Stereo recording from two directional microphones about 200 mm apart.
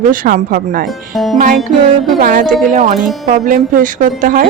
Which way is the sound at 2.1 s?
45° right (ahead or behind).